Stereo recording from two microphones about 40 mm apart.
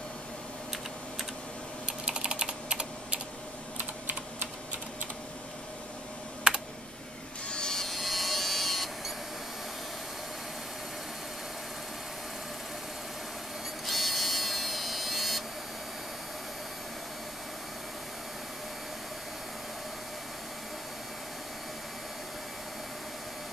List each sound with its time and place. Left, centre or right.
2.0 s typing: right
3.7 s typing: right
7.4 s electric shaver: left
7.7 s a sound: centre
13.8 s printer: centre